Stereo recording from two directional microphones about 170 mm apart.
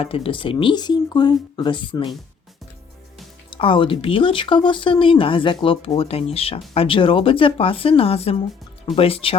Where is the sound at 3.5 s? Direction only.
30° left (ahead or behind).